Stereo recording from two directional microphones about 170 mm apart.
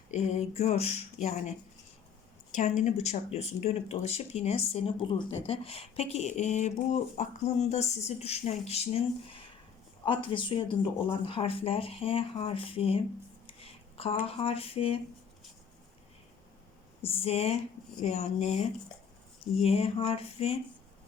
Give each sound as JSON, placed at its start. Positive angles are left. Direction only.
{"t": 0.1, "sound": "a woman's voice", "side_deg": 40}
{"t": 17.0, "sound": "speech", "side_deg": 35}